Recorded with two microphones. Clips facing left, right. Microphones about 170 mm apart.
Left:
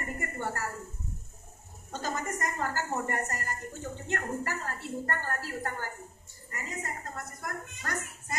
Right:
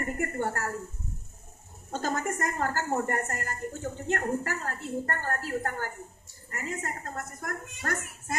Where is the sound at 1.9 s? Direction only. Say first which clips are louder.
Right 4 dB; 50° right (ahead or behind).